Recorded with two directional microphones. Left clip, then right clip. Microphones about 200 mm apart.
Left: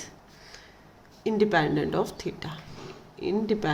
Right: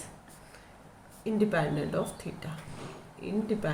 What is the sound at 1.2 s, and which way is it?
A woman's voice, 60° left (ahead or behind).